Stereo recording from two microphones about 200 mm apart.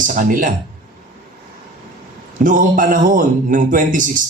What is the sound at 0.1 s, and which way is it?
Speech, 40° right (ahead or behind).